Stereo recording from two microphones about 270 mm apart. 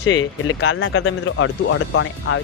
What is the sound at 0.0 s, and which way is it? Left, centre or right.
Speech, left.